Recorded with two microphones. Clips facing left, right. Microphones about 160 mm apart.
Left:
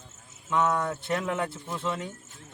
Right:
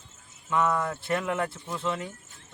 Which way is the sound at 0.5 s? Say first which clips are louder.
Even; centre (ahead or behind).